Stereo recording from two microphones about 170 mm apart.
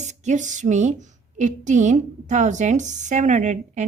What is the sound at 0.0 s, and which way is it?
Speech, 45° right (ahead or behind).